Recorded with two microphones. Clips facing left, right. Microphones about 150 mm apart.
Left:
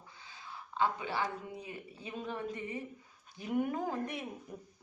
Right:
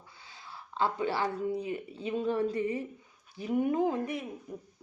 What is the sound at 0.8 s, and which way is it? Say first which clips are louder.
Speech: right 4 dB; 40° right (ahead or behind).